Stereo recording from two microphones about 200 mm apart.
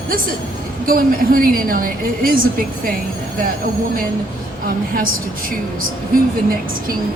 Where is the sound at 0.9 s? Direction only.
45° right (ahead or behind).